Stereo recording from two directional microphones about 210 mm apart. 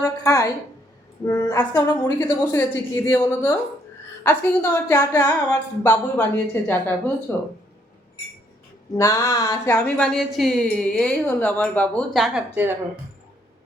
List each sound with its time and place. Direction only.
0.3 s a sound: 15° left (ahead or behind)
1.3 s speech: 10° left (ahead or behind)
9.0 s speech: 15° left (ahead or behind)